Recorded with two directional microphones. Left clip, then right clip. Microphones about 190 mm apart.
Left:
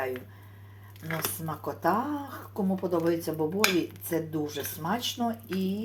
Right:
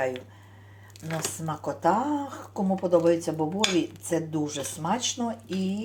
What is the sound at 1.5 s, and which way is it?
Speech, 15° right (ahead or behind).